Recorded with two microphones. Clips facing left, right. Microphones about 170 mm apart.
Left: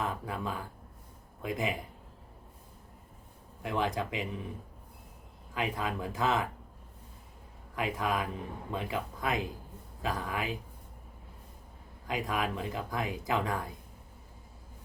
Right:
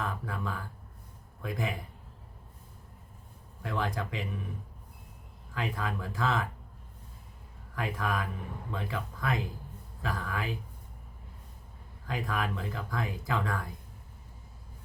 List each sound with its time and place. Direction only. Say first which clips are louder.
0.0 s speech: left 1 dB; 20° left (ahead or behind)
3.6 s speech: left 2 dB; 20° left (ahead or behind)
5.5 s speech: left 1 dB; 20° left (ahead or behind)
7.8 s speech: left 1 dB; 20° left (ahead or behind)
12.0 s speech: left 1 dB; 20° left (ahead or behind)